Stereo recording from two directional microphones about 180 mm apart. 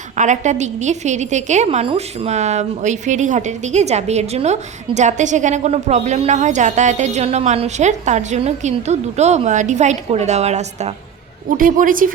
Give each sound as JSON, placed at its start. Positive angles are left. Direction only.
{"t": 0.2, "sound": "a woman's voice", "side_deg": -40}
{"t": 11.5, "sound": "a woman's voice", "side_deg": -50}